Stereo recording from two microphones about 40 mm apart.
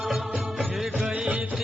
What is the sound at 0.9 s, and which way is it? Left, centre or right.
Music, centre.